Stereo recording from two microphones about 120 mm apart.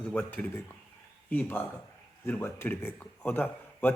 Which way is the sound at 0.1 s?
10° left (ahead or behind).